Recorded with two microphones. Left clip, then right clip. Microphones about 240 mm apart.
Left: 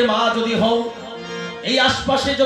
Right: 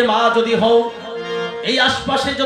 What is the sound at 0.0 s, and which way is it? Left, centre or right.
Music, right.